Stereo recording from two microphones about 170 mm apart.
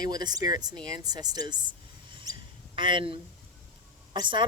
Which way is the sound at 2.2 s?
25° right (ahead or behind).